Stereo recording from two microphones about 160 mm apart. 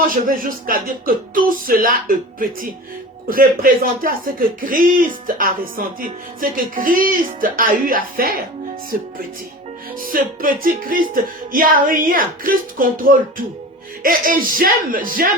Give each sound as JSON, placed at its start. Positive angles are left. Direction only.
{"t": 0.1, "sound": "speech", "side_deg": -60}
{"t": 10.0, "sound": "speech", "side_deg": -60}